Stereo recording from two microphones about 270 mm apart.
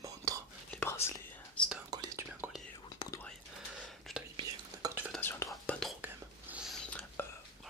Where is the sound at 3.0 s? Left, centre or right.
Centre.